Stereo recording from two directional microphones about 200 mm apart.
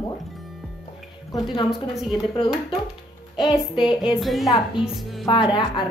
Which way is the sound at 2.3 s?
25° left (ahead or behind).